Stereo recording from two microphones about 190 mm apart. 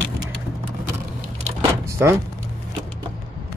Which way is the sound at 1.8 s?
15° right (ahead or behind).